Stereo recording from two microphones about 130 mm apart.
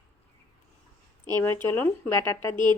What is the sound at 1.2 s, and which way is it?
Speech, 15° left (ahead or behind).